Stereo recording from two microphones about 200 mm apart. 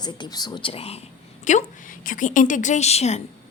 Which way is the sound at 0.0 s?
20° left (ahead or behind).